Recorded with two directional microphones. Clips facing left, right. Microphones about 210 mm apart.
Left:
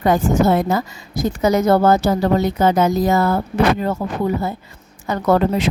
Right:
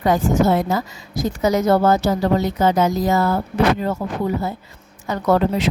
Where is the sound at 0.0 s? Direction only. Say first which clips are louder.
Left 1 dB; 55° left (ahead or behind).